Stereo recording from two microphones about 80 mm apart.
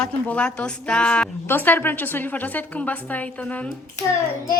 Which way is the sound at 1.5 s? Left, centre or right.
Left.